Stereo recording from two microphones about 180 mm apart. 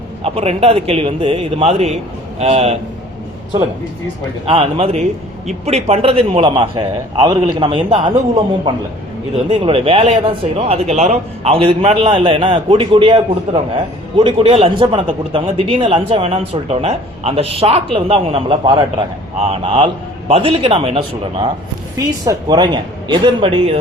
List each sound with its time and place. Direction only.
0.2 s speech: 35° right (ahead or behind)
4.4 s speech: 35° right (ahead or behind)
9.5 s speech: 30° right (ahead or behind)
21.9 s speech: 20° right (ahead or behind)